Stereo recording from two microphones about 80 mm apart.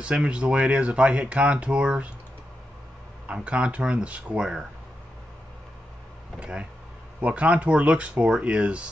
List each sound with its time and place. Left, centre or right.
0.0 s speech: centre
3.3 s speech: centre
6.4 s speech: centre